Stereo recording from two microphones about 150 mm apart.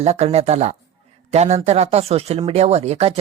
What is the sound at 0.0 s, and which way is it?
Speech, 45° right (ahead or behind).